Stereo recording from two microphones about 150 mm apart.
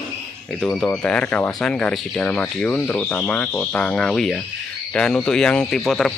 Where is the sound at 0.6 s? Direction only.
5° left (ahead or behind).